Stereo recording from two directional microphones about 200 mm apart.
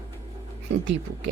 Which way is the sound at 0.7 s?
60° right (ahead or behind).